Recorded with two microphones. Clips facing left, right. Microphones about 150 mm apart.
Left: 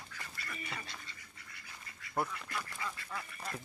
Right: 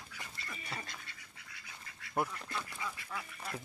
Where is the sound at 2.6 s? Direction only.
15° right (ahead or behind).